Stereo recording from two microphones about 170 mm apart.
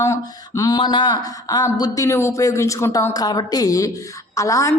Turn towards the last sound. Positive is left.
turn(degrees=20)  # may be behind; listen again after turning